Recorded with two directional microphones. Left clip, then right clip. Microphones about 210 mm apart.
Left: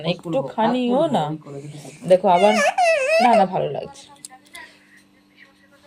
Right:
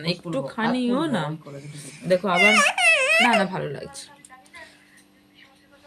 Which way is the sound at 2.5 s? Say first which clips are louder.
Left 1 dB; 35° right (ahead or behind).